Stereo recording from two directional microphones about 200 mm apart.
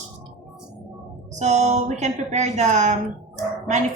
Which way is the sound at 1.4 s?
35° right (ahead or behind).